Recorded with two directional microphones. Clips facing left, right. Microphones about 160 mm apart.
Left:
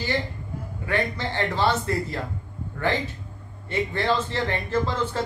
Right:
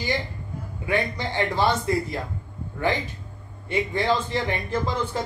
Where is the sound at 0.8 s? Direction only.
15° right (ahead or behind).